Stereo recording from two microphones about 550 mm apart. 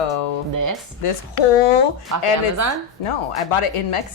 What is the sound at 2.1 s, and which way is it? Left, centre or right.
Speech, right.